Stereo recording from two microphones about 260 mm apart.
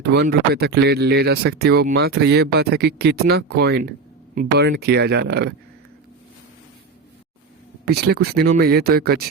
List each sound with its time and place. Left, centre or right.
0.0 s speech: right
7.9 s speech: right